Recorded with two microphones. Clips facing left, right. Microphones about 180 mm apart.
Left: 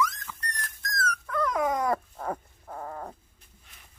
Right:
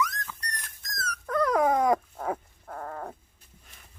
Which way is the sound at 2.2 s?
Centre (ahead or behind).